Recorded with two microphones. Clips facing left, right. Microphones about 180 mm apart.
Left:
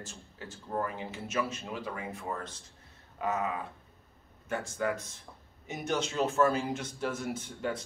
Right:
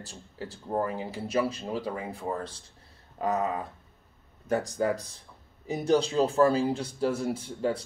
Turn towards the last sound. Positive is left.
turn(degrees=-35)  # may be behind; listen again after turning